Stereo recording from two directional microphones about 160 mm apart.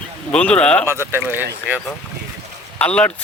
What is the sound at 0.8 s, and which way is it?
Speech, 15° right (ahead or behind).